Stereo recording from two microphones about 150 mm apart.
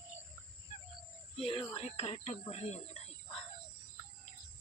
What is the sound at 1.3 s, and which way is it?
Speech, 40° left (ahead or behind).